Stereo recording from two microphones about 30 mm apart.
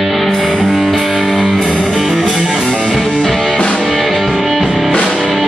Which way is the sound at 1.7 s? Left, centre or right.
Left.